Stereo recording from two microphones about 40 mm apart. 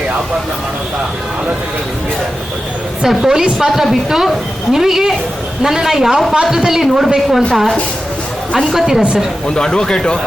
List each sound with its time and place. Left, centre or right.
3.1 s a woman's voice: centre
9.6 s speech: centre